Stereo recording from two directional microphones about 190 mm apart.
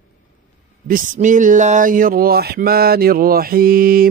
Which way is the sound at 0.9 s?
45° right (ahead or behind).